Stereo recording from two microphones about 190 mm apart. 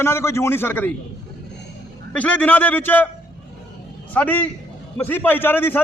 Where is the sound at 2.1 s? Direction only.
10° left (ahead or behind).